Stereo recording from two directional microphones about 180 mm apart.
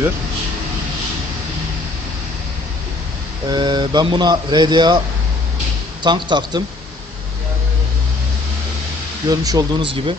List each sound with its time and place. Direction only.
3.4 s speech: 25° right (ahead or behind)
6.0 s speech: 25° right (ahead or behind)
9.3 s speech: 20° right (ahead or behind)